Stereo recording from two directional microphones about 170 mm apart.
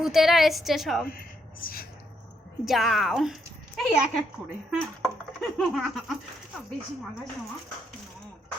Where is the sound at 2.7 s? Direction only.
Centre (ahead or behind).